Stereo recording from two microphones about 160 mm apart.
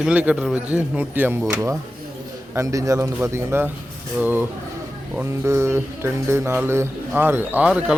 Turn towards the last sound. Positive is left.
turn(degrees=-5)  # may be behind; listen again after turning